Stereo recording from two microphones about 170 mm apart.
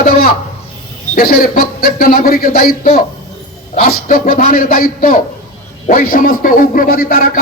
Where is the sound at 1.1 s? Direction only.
60° left (ahead or behind).